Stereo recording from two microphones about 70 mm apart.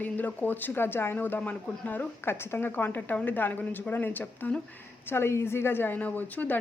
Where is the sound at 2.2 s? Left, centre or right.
Left.